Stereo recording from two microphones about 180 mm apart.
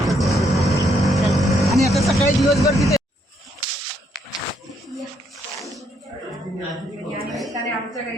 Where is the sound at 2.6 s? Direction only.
20° left (ahead or behind).